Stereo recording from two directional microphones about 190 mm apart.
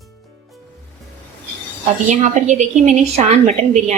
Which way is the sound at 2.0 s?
40° right (ahead or behind).